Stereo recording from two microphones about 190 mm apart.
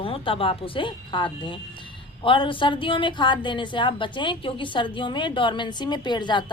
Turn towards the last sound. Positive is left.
turn(degrees=25)  # may be behind; listen again after turning